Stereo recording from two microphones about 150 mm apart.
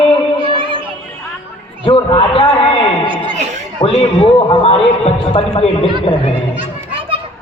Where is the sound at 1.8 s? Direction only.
35° left (ahead or behind).